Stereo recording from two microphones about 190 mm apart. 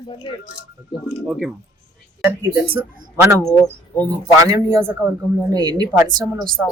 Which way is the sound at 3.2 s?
15° right (ahead or behind).